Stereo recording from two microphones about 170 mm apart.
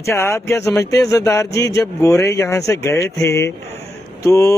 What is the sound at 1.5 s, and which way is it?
Speech, 90° left.